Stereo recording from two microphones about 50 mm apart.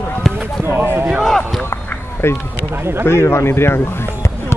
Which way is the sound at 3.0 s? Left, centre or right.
Left.